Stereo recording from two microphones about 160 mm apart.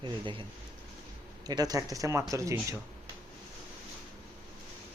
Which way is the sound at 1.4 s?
25° right (ahead or behind).